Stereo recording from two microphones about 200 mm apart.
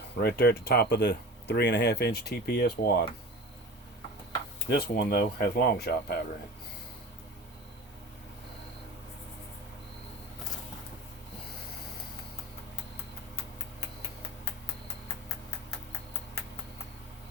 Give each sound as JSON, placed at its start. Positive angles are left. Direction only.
{"t": 0.2, "sound": "speech", "side_deg": 50}
{"t": 4.7, "sound": "speech", "side_deg": 55}